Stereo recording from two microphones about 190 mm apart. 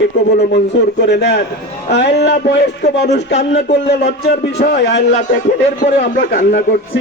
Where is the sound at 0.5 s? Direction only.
60° left (ahead or behind).